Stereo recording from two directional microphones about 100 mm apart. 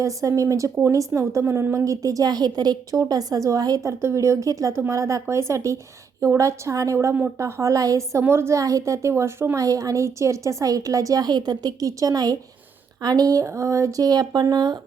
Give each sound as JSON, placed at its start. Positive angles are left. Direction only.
{"t": 0.0, "sound": "a woman's voice", "side_deg": -30}